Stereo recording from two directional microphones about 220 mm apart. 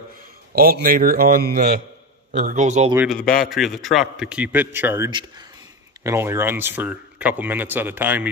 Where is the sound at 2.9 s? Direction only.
5° right (ahead or behind).